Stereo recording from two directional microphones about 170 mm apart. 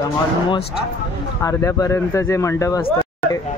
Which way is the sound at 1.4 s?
20° left (ahead or behind).